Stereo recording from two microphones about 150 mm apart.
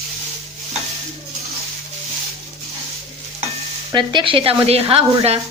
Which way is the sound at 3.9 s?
30° right (ahead or behind).